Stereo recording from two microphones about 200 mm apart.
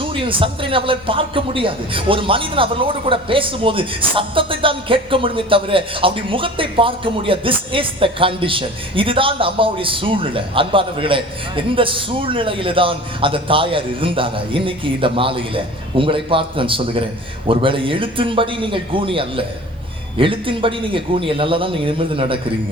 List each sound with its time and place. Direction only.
0.0 s a man's voice: 25° right (ahead or behind)